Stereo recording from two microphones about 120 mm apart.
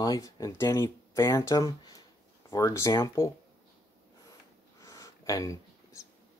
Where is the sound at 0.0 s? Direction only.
30° left (ahead or behind).